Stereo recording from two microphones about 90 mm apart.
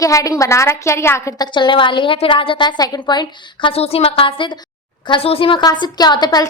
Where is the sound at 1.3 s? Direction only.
55° left (ahead or behind).